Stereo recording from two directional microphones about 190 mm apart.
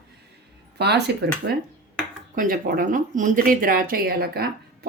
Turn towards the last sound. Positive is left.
turn(degrees=-55)  # may be behind; listen again after turning